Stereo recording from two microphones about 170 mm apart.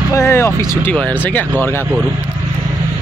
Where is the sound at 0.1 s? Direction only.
15° left (ahead or behind).